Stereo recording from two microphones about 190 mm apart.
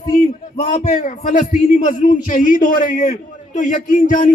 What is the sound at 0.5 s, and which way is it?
A man's voice, 45° left (ahead or behind).